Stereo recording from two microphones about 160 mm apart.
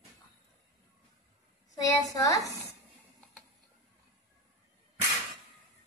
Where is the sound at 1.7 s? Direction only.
20° left (ahead or behind).